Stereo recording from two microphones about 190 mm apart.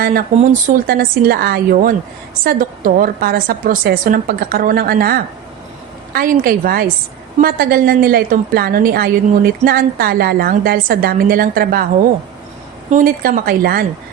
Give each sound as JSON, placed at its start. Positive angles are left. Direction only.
{"t": 0.3, "sound": "speech", "side_deg": -45}
{"t": 12.9, "sound": "speech", "side_deg": -45}